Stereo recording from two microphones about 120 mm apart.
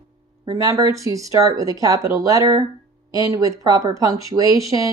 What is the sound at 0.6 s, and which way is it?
Speech, 30° right (ahead or behind).